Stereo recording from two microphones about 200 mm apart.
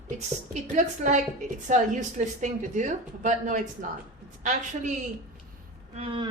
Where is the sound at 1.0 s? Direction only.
40° right (ahead or behind).